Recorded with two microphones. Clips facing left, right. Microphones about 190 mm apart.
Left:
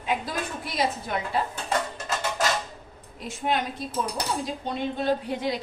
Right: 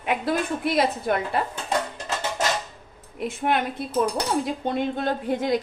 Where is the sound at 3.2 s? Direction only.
60° right (ahead or behind).